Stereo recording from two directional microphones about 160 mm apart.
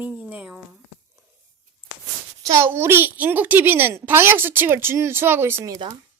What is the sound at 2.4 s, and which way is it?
A child's voice, 15° right (ahead or behind).